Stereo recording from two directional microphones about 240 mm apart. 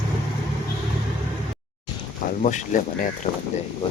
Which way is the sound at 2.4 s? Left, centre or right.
Left.